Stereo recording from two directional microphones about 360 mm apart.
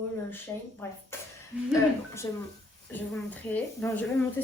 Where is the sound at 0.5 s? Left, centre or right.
Centre.